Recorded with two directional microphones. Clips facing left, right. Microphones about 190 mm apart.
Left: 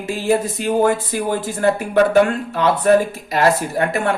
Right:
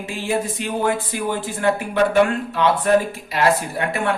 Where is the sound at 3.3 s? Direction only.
45° left (ahead or behind).